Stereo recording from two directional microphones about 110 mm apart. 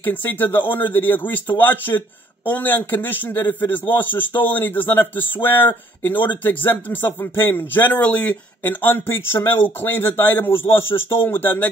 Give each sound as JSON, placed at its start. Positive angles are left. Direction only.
{"t": 0.0, "sound": "a man's voice", "side_deg": 15}